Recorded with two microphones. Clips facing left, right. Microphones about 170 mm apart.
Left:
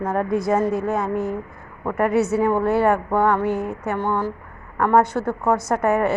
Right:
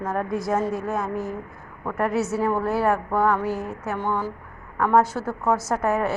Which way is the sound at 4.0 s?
15° left (ahead or behind).